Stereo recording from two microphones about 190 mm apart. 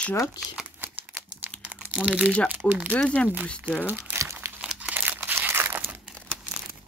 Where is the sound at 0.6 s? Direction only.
10° right (ahead or behind).